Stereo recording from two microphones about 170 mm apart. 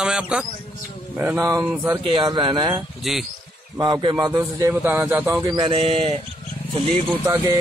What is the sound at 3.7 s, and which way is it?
A man's voice, 25° right (ahead or behind).